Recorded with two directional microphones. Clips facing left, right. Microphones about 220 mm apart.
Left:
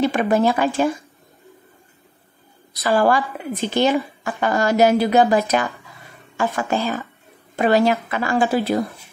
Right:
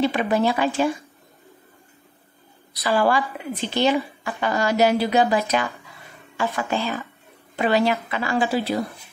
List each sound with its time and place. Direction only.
0.0 s a woman's voice: 50° left (ahead or behind)
2.7 s a woman's voice: 45° left (ahead or behind)